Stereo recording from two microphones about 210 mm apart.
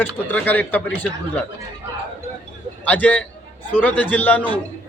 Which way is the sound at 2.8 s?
5° left (ahead or behind).